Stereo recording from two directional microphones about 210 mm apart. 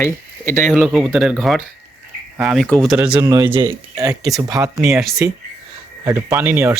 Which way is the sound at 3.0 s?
10° right (ahead or behind).